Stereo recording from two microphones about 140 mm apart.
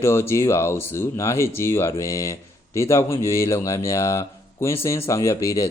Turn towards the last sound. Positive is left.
turn(degrees=20)  # may be behind; listen again after turning